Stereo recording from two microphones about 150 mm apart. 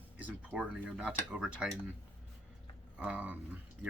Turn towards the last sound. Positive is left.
turn(degrees=-10)  # may be behind; listen again after turning